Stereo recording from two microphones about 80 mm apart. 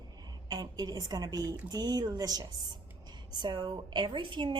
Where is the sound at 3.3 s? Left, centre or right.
Right.